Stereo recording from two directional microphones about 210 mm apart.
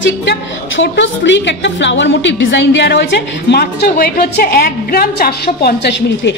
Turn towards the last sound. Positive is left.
turn(degrees=55)  # may be behind; listen again after turning